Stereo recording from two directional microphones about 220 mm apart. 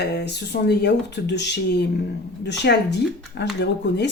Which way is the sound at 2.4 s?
50° left (ahead or behind).